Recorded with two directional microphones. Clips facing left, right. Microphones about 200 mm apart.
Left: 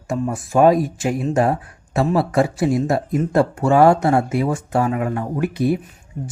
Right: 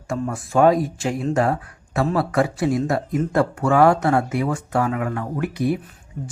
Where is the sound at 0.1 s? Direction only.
20° left (ahead or behind).